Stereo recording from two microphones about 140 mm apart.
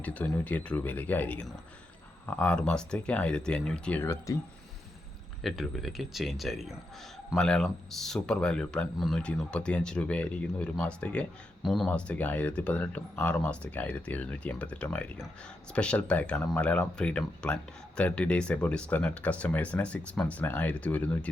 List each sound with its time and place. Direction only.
0.0 s speech: 10° left (ahead or behind)
4.0 s speech: 25° left (ahead or behind)
5.4 s speech: centre (ahead or behind)